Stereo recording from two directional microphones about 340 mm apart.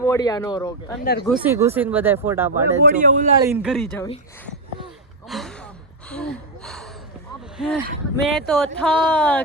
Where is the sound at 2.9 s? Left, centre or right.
Right.